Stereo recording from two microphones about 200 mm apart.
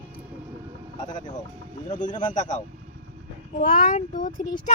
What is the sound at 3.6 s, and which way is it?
Speech, 40° left (ahead or behind).